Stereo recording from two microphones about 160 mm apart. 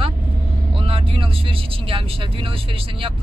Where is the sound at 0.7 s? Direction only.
35° right (ahead or behind).